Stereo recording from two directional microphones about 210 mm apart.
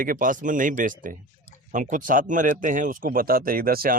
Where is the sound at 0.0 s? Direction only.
40° right (ahead or behind).